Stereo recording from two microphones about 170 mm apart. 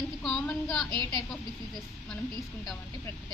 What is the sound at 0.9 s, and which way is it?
Speech, 25° right (ahead or behind).